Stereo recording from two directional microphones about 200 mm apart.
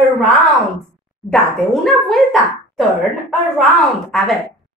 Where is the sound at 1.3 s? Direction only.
Centre (ahead or behind).